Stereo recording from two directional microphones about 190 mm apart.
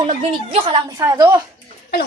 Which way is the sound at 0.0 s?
25° right (ahead or behind).